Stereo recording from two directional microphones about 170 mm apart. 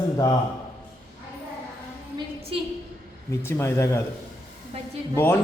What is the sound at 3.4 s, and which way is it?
Speech, 15° left (ahead or behind).